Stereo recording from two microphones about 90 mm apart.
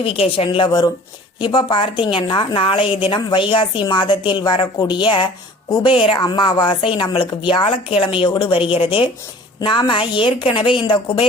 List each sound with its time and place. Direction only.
0.0 s a woman's voice: 90° left; by 3.2 s 75° left (ahead or behind)
3.2 s a woman's voice: 55° left (ahead or behind)
5.8 s speech: 85° left
6.1 s a woman's voice: 55° left (ahead or behind); by 9.0 s 85° left
9.6 s a woman's voice: 60° left (ahead or behind)